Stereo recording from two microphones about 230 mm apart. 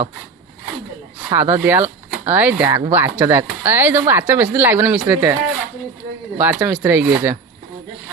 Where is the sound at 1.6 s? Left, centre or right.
Centre.